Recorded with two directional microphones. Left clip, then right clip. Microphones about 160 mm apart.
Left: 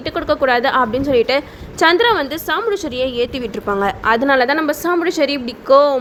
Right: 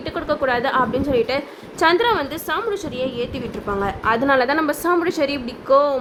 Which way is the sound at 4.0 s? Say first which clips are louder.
Left 2 dB; 15° left (ahead or behind).